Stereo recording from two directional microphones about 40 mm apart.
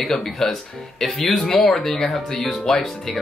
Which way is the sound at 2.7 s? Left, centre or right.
Centre.